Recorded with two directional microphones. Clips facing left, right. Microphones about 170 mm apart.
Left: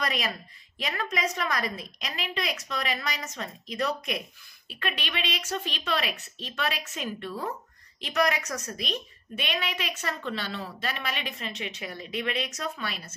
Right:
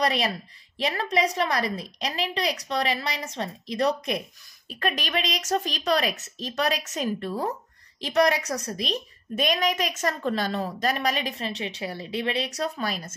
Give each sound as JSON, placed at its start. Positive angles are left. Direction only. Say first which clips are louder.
{"t": 0.0, "sound": "a woman's voice", "louder": "right 6 dB", "side_deg": -35}